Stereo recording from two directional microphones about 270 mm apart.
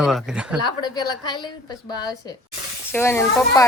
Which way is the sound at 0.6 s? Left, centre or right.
Centre.